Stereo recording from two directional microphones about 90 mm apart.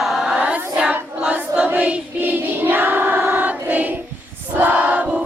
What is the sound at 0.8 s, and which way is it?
Choir, 15° right (ahead or behind).